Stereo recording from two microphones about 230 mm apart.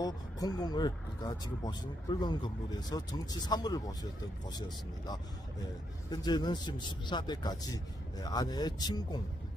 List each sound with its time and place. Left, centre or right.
0.0 s speech: centre